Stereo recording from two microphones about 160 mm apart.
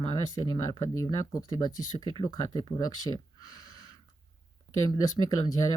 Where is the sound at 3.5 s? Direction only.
25° left (ahead or behind).